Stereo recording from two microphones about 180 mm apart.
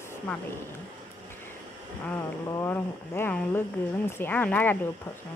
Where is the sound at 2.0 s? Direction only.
10° left (ahead or behind).